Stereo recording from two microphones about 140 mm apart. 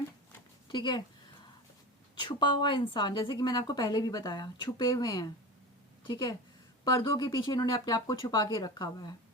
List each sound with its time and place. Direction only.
0.7 s a woman's voice: 30° left (ahead or behind)
2.1 s a woman's voice: 35° left (ahead or behind)